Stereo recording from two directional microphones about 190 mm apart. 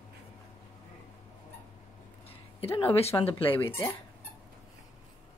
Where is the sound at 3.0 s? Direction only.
30° left (ahead or behind).